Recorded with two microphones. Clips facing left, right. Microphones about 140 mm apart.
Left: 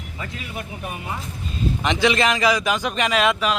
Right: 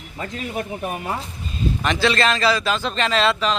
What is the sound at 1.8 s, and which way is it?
A man's voice, 15° left (ahead or behind).